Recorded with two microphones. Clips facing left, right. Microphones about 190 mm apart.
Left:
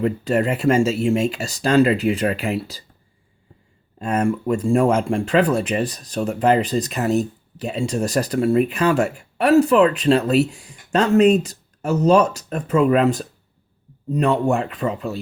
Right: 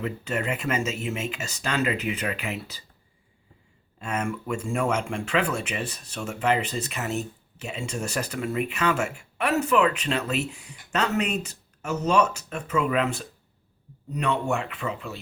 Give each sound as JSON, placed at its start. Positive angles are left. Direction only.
{"t": 0.0, "sound": "speech", "side_deg": 35}
{"t": 4.0, "sound": "speech", "side_deg": 35}